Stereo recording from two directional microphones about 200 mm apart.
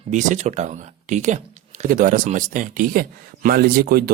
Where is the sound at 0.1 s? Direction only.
35° right (ahead or behind).